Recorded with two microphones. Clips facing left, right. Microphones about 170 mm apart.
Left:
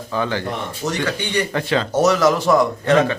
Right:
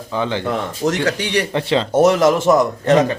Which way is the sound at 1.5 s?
25° right (ahead or behind).